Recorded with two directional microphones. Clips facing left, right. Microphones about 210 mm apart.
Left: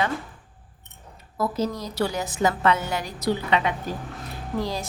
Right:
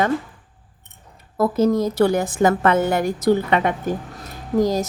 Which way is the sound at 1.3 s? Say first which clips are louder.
Right 9 dB; 50° right (ahead or behind).